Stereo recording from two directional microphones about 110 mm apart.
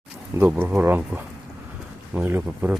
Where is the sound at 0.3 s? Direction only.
20° right (ahead or behind).